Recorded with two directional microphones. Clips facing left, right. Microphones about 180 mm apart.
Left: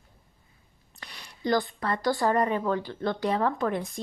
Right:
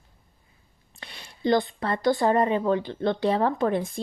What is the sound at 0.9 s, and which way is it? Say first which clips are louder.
A child's voice: right 2 dB; 25° right (ahead or behind).